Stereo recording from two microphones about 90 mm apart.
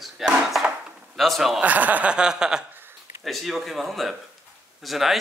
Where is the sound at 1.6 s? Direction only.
20° right (ahead or behind).